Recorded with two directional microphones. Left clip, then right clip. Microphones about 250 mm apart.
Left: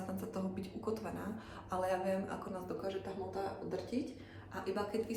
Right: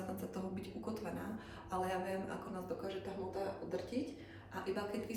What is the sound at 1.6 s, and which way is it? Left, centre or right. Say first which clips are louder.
Speech: left 4 dB; centre.